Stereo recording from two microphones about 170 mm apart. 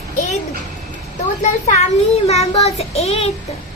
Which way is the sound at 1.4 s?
45° left (ahead or behind).